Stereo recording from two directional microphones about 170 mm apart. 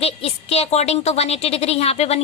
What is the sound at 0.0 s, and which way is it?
A woman's voice, 35° left (ahead or behind).